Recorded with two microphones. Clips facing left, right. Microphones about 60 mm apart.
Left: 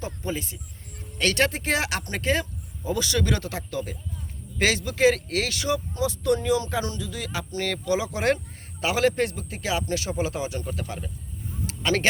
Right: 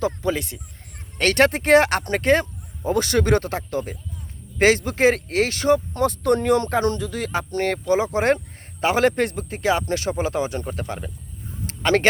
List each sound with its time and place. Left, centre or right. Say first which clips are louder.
0.0 s speech: right 8 dB; right
0.9 s speech: right 5 dB; right
11.6 s a sound: right 5 dB; right